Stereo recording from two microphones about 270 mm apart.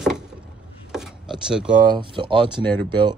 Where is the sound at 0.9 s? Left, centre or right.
Centre.